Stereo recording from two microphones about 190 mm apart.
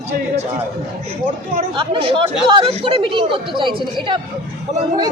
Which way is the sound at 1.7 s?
25° right (ahead or behind).